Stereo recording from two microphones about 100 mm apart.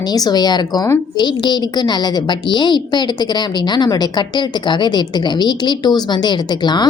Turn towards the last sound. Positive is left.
turn(degrees=45)  # may be behind; listen again after turning